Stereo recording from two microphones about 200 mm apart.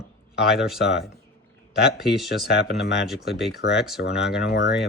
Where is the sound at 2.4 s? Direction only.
55° left (ahead or behind).